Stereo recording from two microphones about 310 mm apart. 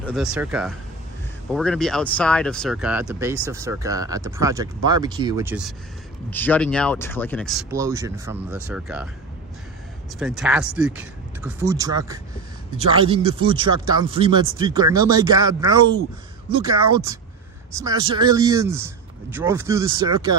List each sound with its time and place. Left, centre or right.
0.0 s speech: centre
6.3 s speech: centre
10.1 s speech: centre